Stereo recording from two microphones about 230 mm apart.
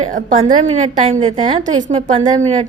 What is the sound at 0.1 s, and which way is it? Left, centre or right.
A woman's voice, right.